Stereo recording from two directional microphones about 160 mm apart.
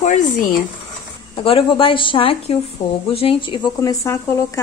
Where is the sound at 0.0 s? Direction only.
55° left (ahead or behind).